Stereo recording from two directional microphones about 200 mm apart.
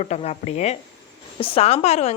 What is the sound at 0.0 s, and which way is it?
A woman's voice, 35° left (ahead or behind).